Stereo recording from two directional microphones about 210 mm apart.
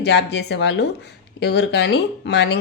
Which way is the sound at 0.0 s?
55° left (ahead or behind).